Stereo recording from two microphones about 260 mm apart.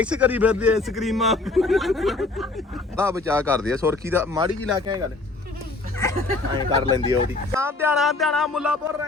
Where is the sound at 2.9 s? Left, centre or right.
Centre.